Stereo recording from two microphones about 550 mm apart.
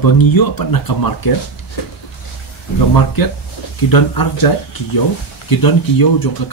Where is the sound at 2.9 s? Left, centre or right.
Left.